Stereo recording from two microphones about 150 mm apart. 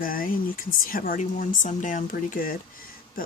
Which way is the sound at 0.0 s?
70° left (ahead or behind).